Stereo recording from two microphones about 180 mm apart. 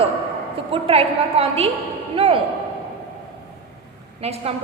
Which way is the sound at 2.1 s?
30° right (ahead or behind).